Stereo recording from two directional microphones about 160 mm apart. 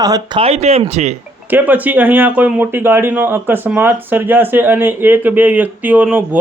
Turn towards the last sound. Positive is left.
turn(degrees=-10)  # may be behind; listen again after turning